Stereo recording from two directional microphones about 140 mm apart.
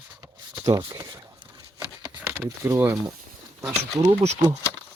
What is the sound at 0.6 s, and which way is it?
Speech, 25° right (ahead or behind).